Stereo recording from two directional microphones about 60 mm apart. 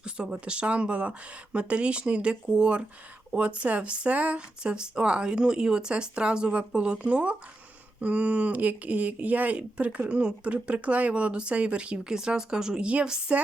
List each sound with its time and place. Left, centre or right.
0.0 s speech: centre